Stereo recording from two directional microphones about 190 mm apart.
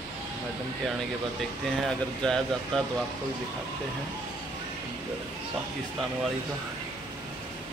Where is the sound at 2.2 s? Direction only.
Centre (ahead or behind).